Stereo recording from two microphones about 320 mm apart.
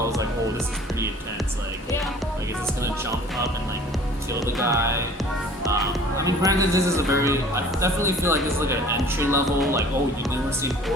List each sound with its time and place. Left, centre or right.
4.5 s speech: centre